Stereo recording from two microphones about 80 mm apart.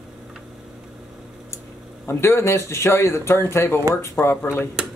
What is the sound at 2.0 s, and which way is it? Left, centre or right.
Speech, left.